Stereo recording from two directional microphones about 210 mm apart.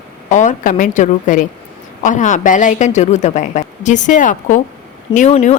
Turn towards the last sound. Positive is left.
turn(degrees=35)  # may be behind; listen again after turning